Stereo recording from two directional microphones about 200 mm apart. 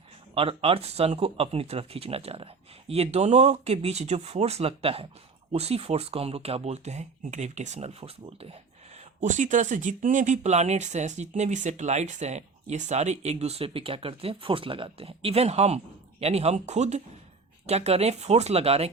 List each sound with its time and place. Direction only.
0.3 s speech: 30° right (ahead or behind)